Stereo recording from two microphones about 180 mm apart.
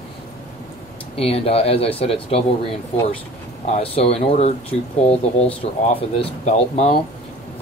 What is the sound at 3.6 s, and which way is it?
Speech, 35° left (ahead or behind).